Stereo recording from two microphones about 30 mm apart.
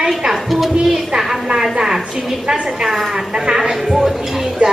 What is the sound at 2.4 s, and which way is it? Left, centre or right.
A woman's voice, right.